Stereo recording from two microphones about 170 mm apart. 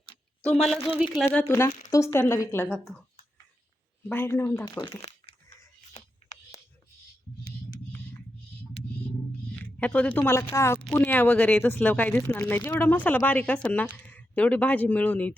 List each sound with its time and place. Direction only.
0.5 s a woman's voice: centre (ahead or behind)
1.2 s speech: 10° left (ahead or behind)
2.6 s a woman's voice: centre (ahead or behind)
4.1 s speech: 15° left (ahead or behind)
5.3 s a sound: 35° left (ahead or behind)
9.8 s speech: 10° left (ahead or behind)